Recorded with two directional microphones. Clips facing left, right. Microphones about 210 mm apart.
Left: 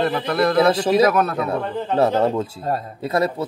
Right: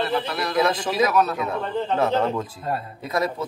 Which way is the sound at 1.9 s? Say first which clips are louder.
Left 5 dB; 35° left (ahead or behind).